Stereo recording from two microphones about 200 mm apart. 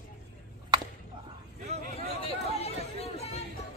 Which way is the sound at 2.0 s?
30° left (ahead or behind).